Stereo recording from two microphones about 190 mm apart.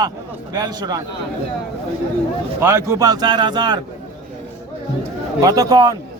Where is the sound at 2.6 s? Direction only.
15° right (ahead or behind).